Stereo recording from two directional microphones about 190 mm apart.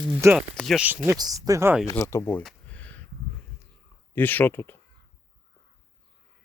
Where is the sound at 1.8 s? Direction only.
15° left (ahead or behind).